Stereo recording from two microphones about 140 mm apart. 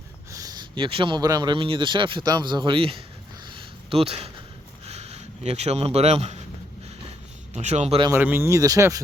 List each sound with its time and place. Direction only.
0.3 s speech: 25° right (ahead or behind); by 3.0 s 40° right (ahead or behind)
3.4 s a sound: 35° right (ahead or behind)
4.9 s speech: 50° right (ahead or behind)
7.5 s speech: 55° right (ahead or behind)
8.1 s speech: 15° right (ahead or behind)